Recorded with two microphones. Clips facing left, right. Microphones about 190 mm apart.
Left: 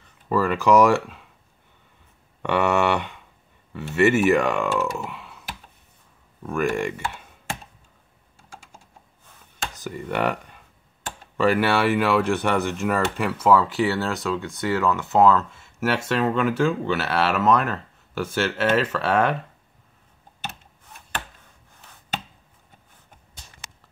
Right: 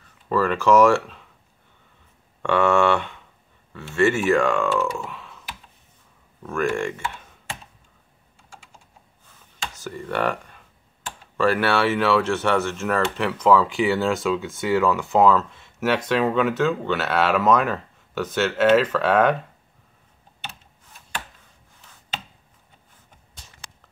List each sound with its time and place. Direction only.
0.3 s speech: 10° left (ahead or behind)
2.4 s speech: 15° left (ahead or behind)
6.4 s speech: 10° left (ahead or behind)
9.8 s speech: 15° left (ahead or behind)